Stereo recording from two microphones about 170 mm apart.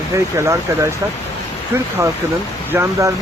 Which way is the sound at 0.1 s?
15° right (ahead or behind).